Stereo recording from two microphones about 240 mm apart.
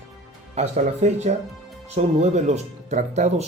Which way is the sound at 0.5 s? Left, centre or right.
Right.